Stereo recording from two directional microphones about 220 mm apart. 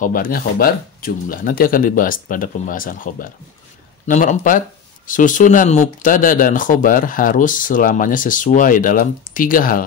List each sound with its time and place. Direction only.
0.0 s speech: 40° left (ahead or behind)